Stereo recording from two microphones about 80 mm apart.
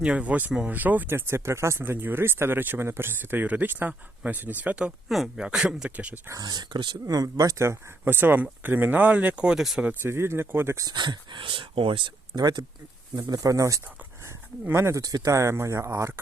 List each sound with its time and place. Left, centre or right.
0.0 s speech: centre
5.0 s speech: centre
6.4 s speech: right
7.0 s speech: right
7.6 s speech: right; by 9.8 s centre
9.8 s speech: right
10.9 s speech: right
14.7 s speech: right
15.0 s speech: right